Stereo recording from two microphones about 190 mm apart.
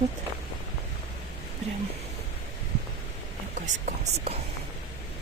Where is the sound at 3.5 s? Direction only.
40° right (ahead or behind).